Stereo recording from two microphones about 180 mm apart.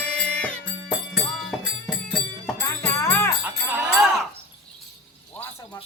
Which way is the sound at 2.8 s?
15° left (ahead or behind).